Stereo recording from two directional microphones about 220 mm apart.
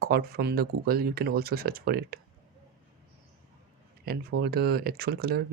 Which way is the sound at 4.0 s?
45° right (ahead or behind).